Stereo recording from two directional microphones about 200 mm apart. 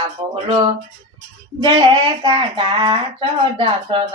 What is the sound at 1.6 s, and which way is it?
Speech, 25° right (ahead or behind).